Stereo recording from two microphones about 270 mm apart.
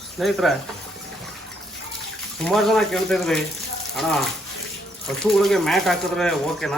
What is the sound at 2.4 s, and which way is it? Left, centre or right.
Speech, centre.